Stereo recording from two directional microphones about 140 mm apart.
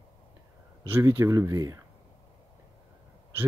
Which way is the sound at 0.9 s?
15° right (ahead or behind).